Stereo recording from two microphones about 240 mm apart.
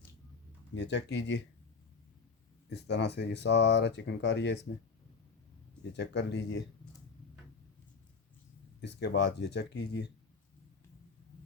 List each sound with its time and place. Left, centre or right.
0.7 s speech: left
2.6 s speech: left
6.0 s speech: left
9.0 s speech: left